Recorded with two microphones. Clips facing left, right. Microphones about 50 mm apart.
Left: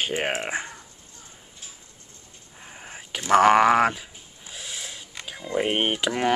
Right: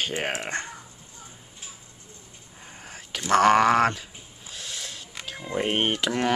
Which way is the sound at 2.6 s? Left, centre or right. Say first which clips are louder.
Left 2 dB; centre.